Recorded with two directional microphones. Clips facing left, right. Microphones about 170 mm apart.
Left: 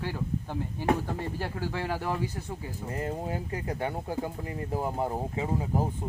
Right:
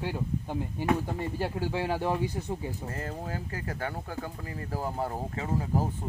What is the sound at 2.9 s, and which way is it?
Speech, 20° left (ahead or behind).